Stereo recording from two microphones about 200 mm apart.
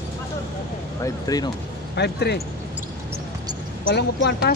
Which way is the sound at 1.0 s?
20° left (ahead or behind).